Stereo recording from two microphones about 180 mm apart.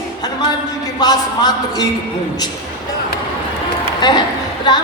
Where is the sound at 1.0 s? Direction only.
20° left (ahead or behind).